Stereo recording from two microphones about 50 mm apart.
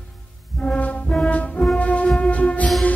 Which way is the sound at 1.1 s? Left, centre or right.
Left.